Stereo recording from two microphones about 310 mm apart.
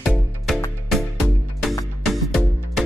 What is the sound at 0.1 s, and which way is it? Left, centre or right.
Music, centre.